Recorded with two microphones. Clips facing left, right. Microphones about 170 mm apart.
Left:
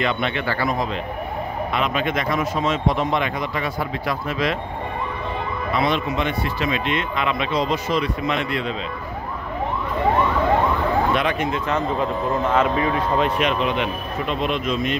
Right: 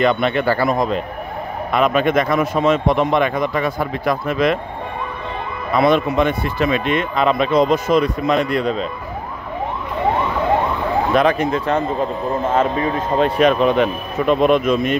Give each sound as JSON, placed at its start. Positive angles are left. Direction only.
{"t": 0.0, "sound": "speech", "side_deg": -45}
{"t": 5.7, "sound": "speech", "side_deg": -50}
{"t": 11.1, "sound": "speech", "side_deg": -40}